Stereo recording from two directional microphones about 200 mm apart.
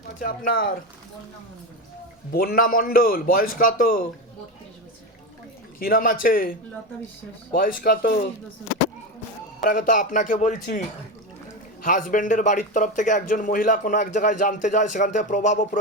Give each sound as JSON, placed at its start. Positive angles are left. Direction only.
{"t": 0.2, "sound": "a man's voice", "side_deg": 45}
{"t": 2.3, "sound": "a man's voice", "side_deg": 50}
{"t": 5.8, "sound": "a man's voice", "side_deg": 45}
{"t": 9.6, "sound": "a man's voice", "side_deg": 40}